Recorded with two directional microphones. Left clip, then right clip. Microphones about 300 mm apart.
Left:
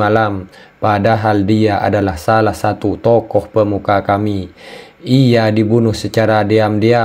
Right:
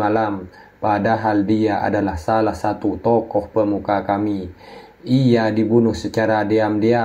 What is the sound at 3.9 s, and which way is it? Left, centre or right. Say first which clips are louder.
Speech: left 5 dB; left.